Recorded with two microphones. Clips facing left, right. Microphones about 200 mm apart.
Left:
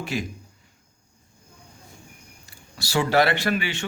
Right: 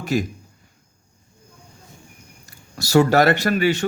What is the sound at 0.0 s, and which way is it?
Speech, 40° right (ahead or behind).